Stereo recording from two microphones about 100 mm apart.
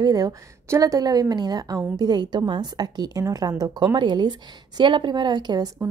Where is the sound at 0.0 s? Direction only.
40° right (ahead or behind).